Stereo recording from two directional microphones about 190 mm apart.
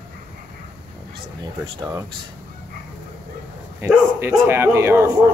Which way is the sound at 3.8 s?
10° right (ahead or behind).